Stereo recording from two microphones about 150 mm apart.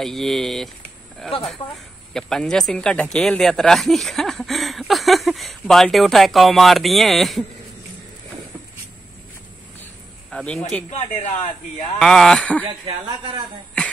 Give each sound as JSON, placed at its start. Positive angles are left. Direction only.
{"t": 0.0, "sound": "speech", "side_deg": 0}
{"t": 1.6, "sound": "a woman's voice", "side_deg": 35}
{"t": 2.1, "sound": "speech", "side_deg": 5}
{"t": 10.3, "sound": "speech", "side_deg": 5}
{"t": 10.9, "sound": "speech", "side_deg": 50}
{"t": 12.0, "sound": "speech", "side_deg": 5}
{"t": 12.6, "sound": "speech", "side_deg": -30}